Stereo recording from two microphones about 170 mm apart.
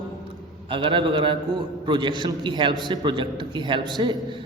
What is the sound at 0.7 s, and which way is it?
A man's voice, 30° right (ahead or behind).